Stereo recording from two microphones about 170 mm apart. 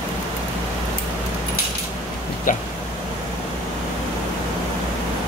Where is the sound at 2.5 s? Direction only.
50° left (ahead or behind).